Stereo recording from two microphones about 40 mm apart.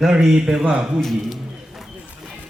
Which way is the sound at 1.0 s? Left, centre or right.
Centre.